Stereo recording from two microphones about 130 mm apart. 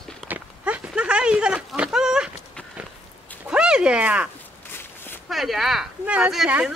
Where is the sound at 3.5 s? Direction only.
5° right (ahead or behind).